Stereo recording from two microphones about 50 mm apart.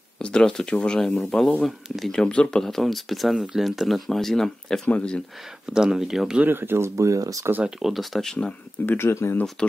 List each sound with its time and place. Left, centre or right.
0.2 s speech: centre
1.2 s speech: centre
4.8 s speech: left
5.7 s speech: centre
6.4 s speech: right
7.0 s speech: right
7.8 s speech: centre
8.8 s speech: left
9.6 s speech: centre